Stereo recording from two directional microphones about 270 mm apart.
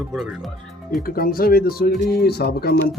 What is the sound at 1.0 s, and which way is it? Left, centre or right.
Speech, left.